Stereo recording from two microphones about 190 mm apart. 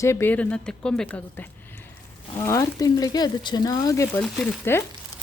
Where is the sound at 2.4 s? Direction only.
15° left (ahead or behind).